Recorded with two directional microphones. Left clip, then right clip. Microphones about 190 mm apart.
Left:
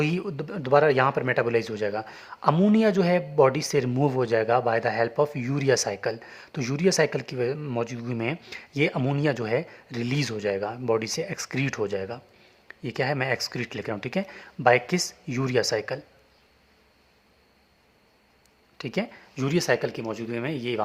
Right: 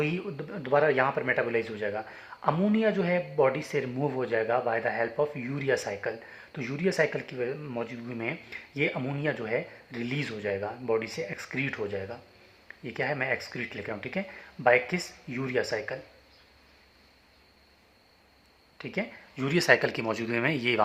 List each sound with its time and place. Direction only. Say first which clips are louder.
0.0 s speech: left 3 dB; 45° left (ahead or behind)
18.8 s speech: left 3 dB; 45° left (ahead or behind); by 20.8 s 25° left (ahead or behind)